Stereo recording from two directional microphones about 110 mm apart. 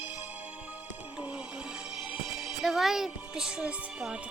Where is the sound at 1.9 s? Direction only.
5° right (ahead or behind).